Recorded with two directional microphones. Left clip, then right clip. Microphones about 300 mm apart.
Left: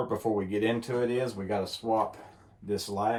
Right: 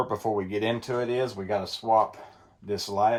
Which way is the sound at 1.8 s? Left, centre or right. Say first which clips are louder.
Right 9 dB; right.